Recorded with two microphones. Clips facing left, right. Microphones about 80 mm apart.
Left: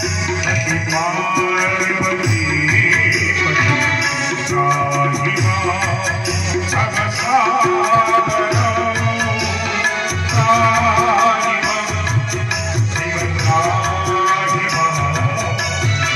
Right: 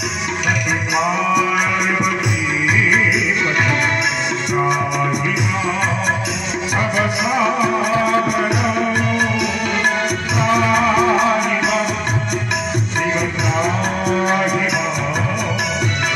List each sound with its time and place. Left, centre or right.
0.9 s music: centre
7.2 s music: centre
10.3 s music: centre
13.5 s music: centre